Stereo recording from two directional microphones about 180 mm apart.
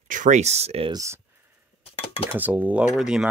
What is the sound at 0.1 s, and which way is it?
Speech, 45° right (ahead or behind).